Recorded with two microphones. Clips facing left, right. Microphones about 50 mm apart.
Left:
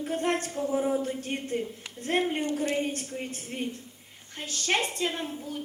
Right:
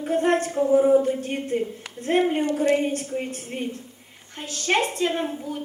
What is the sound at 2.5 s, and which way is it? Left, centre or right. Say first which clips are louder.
Speech: right 7 dB; right.